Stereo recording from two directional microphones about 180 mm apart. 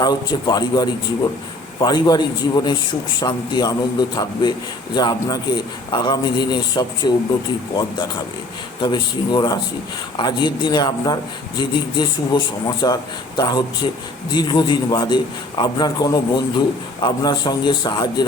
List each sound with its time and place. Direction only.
0.0 s a man's voice: 25° left (ahead or behind)